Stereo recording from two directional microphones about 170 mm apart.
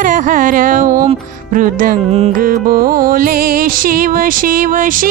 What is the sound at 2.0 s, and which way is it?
Music, 40° right (ahead or behind).